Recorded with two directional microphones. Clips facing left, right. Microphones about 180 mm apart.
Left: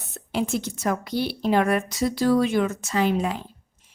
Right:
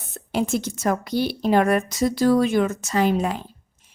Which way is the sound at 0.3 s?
45° right (ahead or behind).